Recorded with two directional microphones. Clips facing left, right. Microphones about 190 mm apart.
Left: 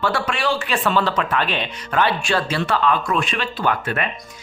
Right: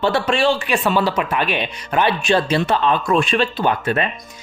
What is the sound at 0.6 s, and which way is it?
A man's voice, 15° right (ahead or behind).